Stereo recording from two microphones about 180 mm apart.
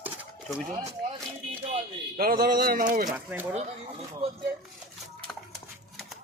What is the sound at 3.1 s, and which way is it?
Speech, 10° right (ahead or behind).